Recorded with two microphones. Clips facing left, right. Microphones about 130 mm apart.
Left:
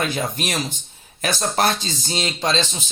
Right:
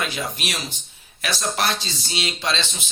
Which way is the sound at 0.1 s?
45° left (ahead or behind).